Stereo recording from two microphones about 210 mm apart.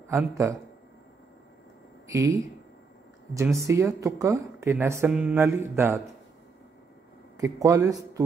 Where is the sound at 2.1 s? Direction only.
15° right (ahead or behind).